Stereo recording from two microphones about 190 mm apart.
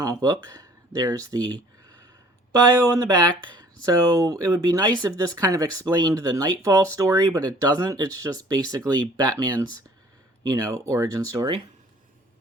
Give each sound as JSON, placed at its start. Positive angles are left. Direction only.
{"t": 0.0, "sound": "speech", "side_deg": -20}
{"t": 2.6, "sound": "speech", "side_deg": -20}